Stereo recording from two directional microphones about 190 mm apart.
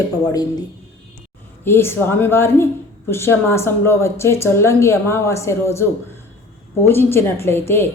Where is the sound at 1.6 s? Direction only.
10° left (ahead or behind).